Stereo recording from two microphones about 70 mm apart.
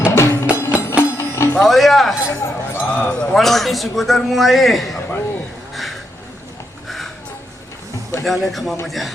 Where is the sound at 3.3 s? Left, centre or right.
Centre.